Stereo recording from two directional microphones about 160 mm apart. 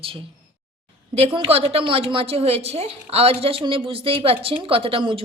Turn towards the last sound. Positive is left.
turn(degrees=-35)  # may be behind; listen again after turning